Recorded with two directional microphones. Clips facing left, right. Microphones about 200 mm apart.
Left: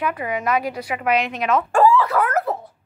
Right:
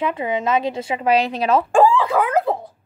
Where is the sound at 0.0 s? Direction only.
25° right (ahead or behind).